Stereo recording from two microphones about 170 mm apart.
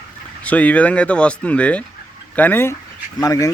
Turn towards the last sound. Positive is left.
turn(degrees=20)  # may be behind; listen again after turning